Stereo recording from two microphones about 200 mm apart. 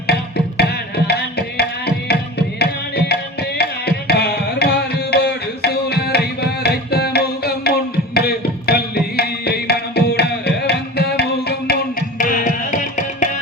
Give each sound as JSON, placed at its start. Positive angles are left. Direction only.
{"t": 0.1, "sound": "music", "side_deg": 55}
{"t": 3.6, "sound": "tabla", "side_deg": 55}
{"t": 8.1, "sound": "music", "side_deg": 50}